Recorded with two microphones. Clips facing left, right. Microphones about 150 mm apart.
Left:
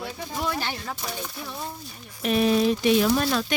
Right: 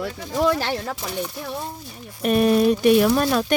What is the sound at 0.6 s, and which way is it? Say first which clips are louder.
Speech: right 6 dB; 90° right.